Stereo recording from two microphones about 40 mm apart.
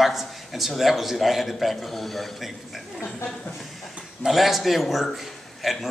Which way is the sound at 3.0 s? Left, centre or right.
Left.